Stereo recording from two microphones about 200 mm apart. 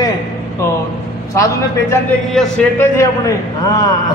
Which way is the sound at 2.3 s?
5° left (ahead or behind).